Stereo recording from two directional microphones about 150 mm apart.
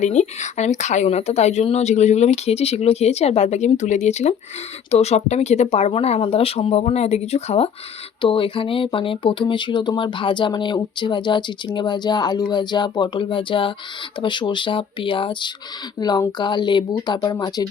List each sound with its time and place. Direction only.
0.0 s a woman's voice: 50° left (ahead or behind); by 17.7 s 25° left (ahead or behind)